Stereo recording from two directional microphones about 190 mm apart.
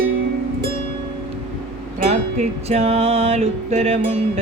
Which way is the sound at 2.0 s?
35° right (ahead or behind).